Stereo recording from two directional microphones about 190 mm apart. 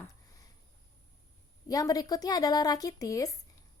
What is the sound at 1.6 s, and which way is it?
Speech, 20° left (ahead or behind).